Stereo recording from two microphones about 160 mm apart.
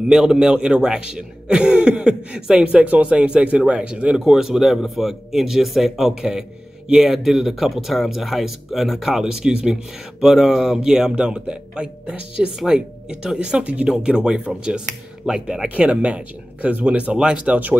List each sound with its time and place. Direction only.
0.1 s speech: 5° right (ahead or behind)